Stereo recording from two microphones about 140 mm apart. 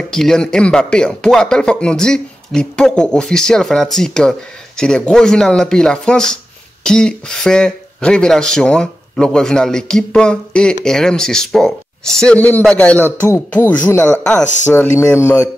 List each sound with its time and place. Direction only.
0.1 s speech: 5° left (ahead or behind)